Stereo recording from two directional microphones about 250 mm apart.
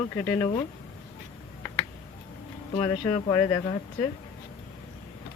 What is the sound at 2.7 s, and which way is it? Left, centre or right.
Speech, centre.